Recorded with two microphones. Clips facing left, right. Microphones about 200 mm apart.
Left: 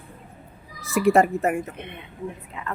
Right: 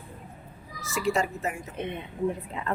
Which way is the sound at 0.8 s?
60° left (ahead or behind).